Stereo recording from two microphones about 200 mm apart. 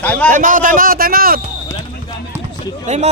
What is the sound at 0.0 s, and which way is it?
Speech, 5° left (ahead or behind).